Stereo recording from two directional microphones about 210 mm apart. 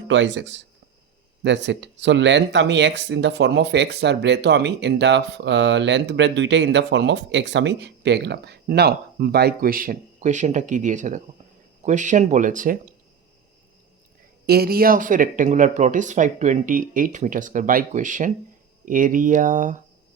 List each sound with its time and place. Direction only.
0.1 s speech: 60° right (ahead or behind); by 12.9 s 40° right (ahead or behind)
14.4 s speech: 45° right (ahead or behind)